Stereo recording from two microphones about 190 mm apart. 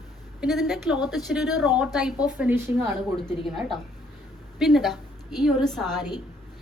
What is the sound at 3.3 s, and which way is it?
A woman's voice, centre (ahead or behind).